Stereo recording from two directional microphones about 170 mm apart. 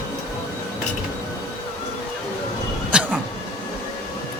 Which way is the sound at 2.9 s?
5° right (ahead or behind).